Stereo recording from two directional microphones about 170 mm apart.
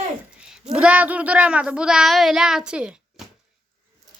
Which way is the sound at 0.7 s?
5° right (ahead or behind).